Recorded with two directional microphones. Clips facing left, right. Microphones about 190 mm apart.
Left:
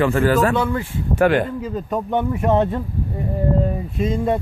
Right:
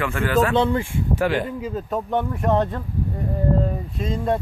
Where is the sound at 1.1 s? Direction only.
55° left (ahead or behind).